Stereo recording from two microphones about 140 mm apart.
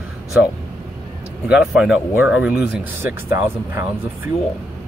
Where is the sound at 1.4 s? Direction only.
5° right (ahead or behind).